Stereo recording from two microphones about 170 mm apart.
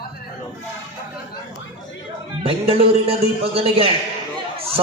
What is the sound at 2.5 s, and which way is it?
A man's voice, 35° right (ahead or behind).